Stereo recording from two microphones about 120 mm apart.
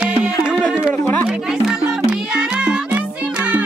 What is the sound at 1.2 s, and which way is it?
Music, 10° right (ahead or behind).